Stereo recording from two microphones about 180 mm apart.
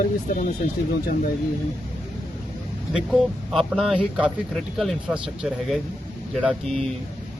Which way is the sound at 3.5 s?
Centre (ahead or behind).